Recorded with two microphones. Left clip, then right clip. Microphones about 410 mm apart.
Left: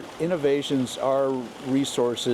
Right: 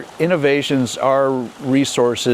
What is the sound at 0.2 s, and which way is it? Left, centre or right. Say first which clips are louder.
Speech: right 8 dB; right.